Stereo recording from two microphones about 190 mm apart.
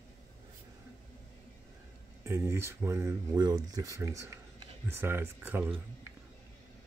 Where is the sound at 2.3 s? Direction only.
15° right (ahead or behind).